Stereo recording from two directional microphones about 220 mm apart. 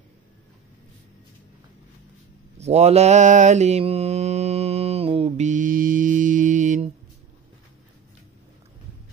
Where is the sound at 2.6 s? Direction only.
30° right (ahead or behind).